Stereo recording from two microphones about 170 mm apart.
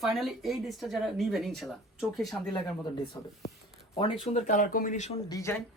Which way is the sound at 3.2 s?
10° left (ahead or behind).